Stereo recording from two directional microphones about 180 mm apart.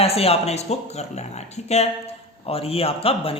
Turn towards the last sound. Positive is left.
turn(degrees=30)  # may be behind; listen again after turning